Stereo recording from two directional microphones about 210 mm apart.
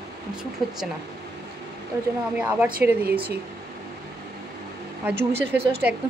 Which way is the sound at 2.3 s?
5° right (ahead or behind).